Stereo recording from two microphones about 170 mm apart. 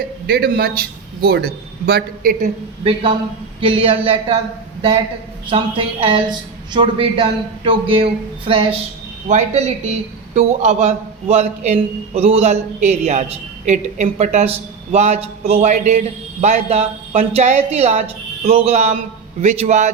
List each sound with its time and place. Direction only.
0.3 s a man's voice: 65° right (ahead or behind)
2.8 s a man's voice: 35° right (ahead or behind)
5.5 s a man's voice: 30° right (ahead or behind)